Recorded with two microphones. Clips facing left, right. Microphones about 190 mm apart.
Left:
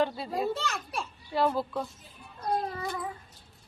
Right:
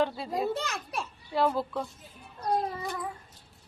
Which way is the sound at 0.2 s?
Centre (ahead or behind).